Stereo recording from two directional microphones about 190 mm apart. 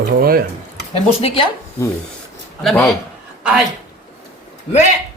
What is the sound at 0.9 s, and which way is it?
Speech, 30° left (ahead or behind).